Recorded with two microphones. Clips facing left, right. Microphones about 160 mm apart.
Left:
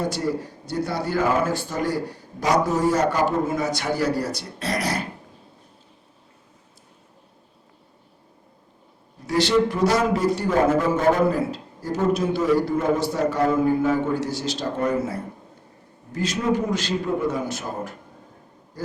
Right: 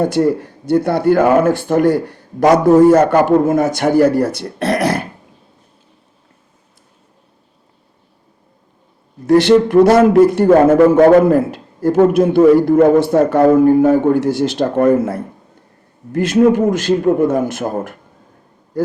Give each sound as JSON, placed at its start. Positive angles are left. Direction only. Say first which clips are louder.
{"t": 0.0, "sound": "speech", "louder": "right 11 dB", "side_deg": -55}
{"t": 9.2, "sound": "speech", "louder": "right 10 dB", "side_deg": -55}
{"t": 10.9, "sound": "a man's voice", "louder": "right 11 dB", "side_deg": -65}